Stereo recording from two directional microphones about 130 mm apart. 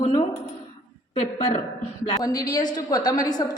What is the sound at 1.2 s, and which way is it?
Speech, 60° left (ahead or behind).